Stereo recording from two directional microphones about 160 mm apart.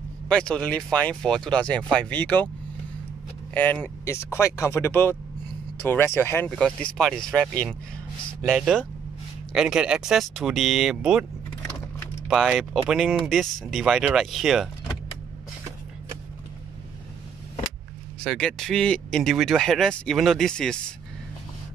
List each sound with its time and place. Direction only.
0.3 s speech: 5° left (ahead or behind)
3.5 s speech: 10° left (ahead or behind); by 11.2 s 5° right (ahead or behind)
12.3 s speech: 5° right (ahead or behind)
18.2 s speech: 5° left (ahead or behind)